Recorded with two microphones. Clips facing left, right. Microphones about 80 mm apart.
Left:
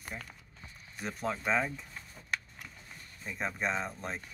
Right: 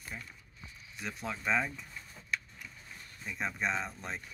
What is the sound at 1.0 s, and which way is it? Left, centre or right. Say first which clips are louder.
Speech: left 4 dB; left.